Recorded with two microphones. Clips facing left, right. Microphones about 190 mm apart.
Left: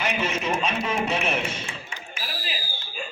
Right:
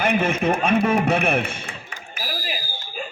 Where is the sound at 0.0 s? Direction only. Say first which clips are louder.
Right 6 dB; 55° right (ahead or behind).